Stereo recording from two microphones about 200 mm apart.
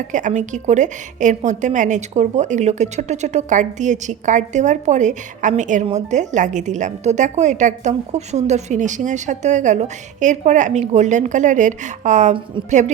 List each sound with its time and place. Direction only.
0.1 s a woman's voice: 40° right (ahead or behind)